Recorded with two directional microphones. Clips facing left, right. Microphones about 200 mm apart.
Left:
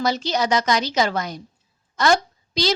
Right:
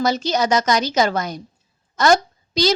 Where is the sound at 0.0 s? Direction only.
45° right (ahead or behind).